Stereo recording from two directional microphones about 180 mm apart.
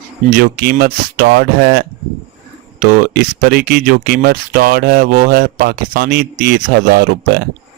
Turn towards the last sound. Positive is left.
turn(degrees=-60)  # may be behind; listen again after turning